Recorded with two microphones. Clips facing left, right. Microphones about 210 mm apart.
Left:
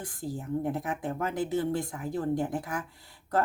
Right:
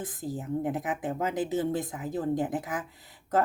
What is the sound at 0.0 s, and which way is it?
Speech, 20° right (ahead or behind).